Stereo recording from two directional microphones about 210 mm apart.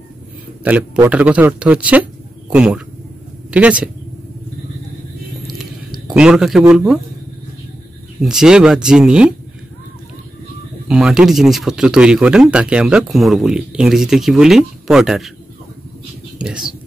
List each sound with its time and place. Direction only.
0.7 s a man's voice: 5° right (ahead or behind)
6.0 s speech: 5° right (ahead or behind)
8.2 s speech: 5° right (ahead or behind)
10.9 s speech: 5° right (ahead or behind)
16.3 s speech: 5° right (ahead or behind)